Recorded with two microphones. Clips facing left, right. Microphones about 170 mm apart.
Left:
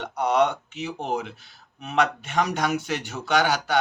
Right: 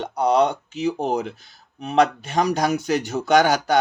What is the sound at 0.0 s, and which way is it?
Speech, 35° right (ahead or behind).